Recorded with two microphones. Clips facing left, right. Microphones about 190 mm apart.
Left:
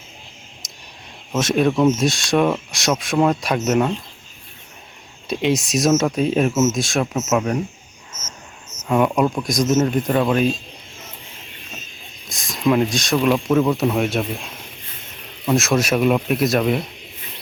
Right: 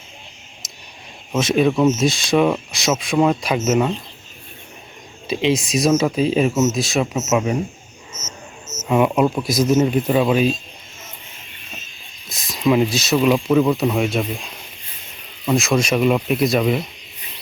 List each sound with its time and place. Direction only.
0.6 s a sound: centre (ahead or behind)
1.4 s speech: centre (ahead or behind)
5.3 s speech: centre (ahead or behind)
8.9 s speech: 5° right (ahead or behind)
12.3 s speech: centre (ahead or behind)